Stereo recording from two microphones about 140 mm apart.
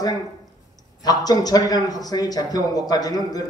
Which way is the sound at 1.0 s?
25° left (ahead or behind).